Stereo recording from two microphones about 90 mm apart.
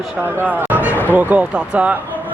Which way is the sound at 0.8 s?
25° left (ahead or behind).